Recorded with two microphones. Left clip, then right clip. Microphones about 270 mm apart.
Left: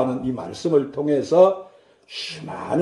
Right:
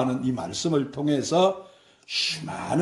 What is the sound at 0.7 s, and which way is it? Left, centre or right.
Speech, right.